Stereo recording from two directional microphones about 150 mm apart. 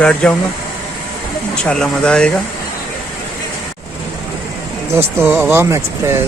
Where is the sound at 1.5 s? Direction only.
5° left (ahead or behind).